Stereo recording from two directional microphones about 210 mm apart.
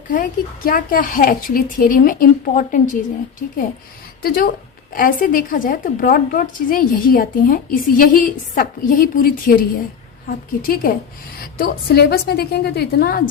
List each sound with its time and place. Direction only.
0.1 s a woman's voice: 40° left (ahead or behind)
4.2 s a woman's voice: 45° left (ahead or behind)